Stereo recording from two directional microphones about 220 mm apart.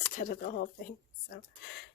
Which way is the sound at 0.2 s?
35° left (ahead or behind).